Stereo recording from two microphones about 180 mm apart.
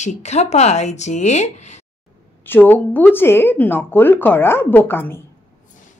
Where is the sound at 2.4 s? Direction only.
10° left (ahead or behind).